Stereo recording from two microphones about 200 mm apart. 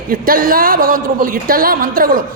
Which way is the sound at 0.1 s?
45° right (ahead or behind).